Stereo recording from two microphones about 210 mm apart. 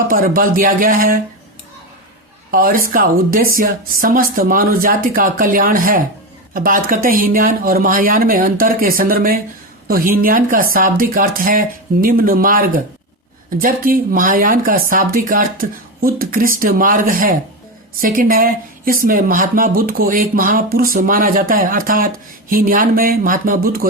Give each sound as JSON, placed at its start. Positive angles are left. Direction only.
{"t": 0.1, "sound": "speech", "side_deg": -40}
{"t": 2.5, "sound": "speech", "side_deg": -45}
{"t": 16.0, "sound": "a sound", "side_deg": -45}
{"t": 16.6, "sound": "speech", "side_deg": -40}